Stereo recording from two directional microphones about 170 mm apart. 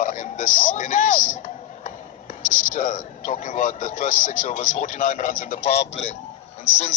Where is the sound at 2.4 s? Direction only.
50° left (ahead or behind).